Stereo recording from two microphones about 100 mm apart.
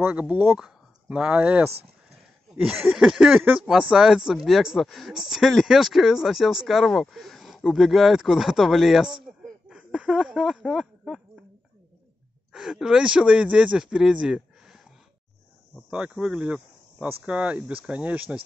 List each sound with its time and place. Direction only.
0.0 s speech: 15° right (ahead or behind)
9.2 s a sound: 5° right (ahead or behind)
12.5 s speech: 5° right (ahead or behind)
15.9 s speech: 10° right (ahead or behind)